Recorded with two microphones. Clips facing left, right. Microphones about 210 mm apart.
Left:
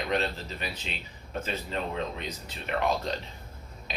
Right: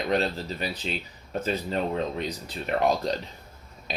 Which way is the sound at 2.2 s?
35° right (ahead or behind).